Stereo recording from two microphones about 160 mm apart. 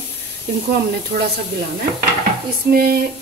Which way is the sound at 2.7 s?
70° right (ahead or behind).